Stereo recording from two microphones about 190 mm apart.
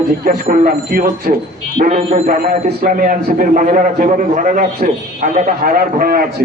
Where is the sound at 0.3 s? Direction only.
50° right (ahead or behind).